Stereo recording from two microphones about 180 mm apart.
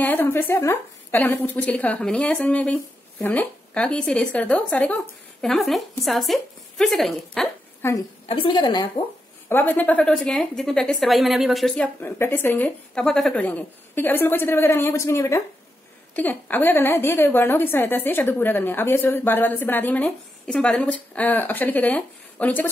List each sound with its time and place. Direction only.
0.0 s a woman's voice: 10° left (ahead or behind)
7.8 s a woman's voice: 15° left (ahead or behind)
8.3 s a woman's voice: 30° left (ahead or behind)
9.5 s a woman's voice: 10° left (ahead or behind)